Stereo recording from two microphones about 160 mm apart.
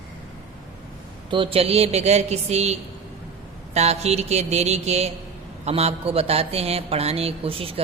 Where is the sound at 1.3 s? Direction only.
35° right (ahead or behind).